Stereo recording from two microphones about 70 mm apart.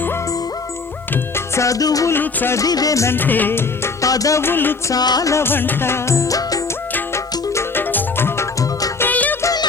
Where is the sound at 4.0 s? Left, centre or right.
Left.